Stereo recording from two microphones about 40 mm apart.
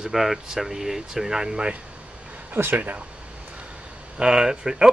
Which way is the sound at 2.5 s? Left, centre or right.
Right.